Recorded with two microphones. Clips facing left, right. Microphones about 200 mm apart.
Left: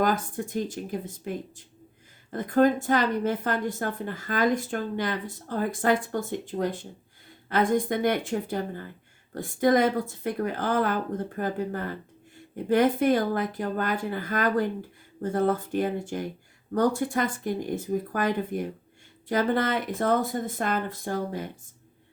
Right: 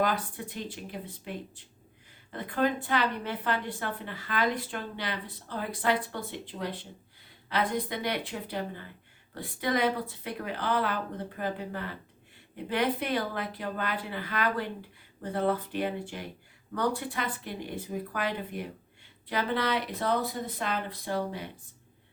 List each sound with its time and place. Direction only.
0.0 s a woman's voice: 45° left (ahead or behind)